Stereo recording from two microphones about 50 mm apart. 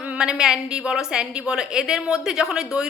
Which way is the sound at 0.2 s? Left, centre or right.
Centre.